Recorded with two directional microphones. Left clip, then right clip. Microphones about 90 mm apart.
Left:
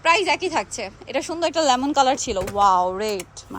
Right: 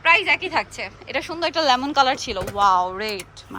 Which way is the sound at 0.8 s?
45° left (ahead or behind).